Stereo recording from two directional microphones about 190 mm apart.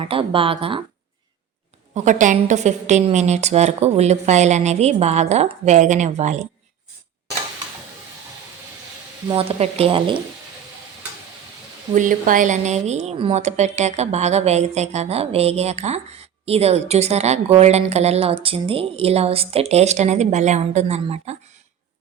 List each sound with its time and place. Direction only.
0.0 s speech: 30° right (ahead or behind)
2.0 s a woman's voice: 40° right (ahead or behind)
9.3 s speech: 30° right (ahead or behind)
11.9 s a woman's voice: 45° right (ahead or behind)